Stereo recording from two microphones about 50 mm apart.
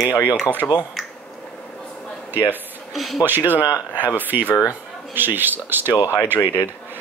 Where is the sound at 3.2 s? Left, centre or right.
Right.